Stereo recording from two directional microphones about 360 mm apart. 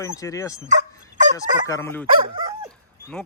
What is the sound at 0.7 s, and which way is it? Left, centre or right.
Fowl, centre.